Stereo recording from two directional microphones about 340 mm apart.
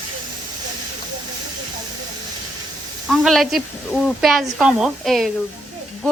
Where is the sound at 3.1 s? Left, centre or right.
Centre.